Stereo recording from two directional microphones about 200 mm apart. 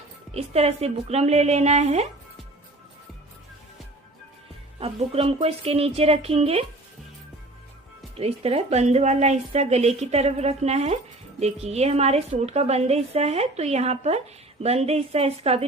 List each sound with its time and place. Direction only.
0.3 s a woman's voice: 30° right (ahead or behind)
4.8 s a woman's voice: 30° right (ahead or behind)
8.1 s a woman's voice: 30° right (ahead or behind)